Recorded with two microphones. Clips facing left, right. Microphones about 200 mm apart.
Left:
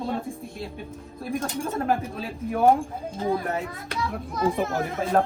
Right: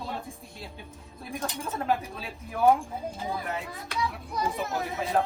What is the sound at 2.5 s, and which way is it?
Speech, 30° left (ahead or behind).